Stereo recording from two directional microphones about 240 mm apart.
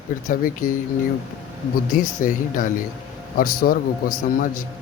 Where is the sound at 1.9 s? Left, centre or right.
Left.